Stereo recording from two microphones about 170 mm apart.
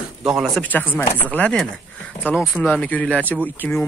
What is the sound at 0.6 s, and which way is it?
Speech, 10° left (ahead or behind).